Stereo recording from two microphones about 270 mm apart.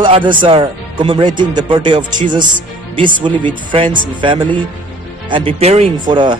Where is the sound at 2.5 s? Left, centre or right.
Right.